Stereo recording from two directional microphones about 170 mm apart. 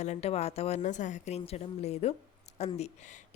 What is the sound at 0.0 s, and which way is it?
Speech, 40° left (ahead or behind).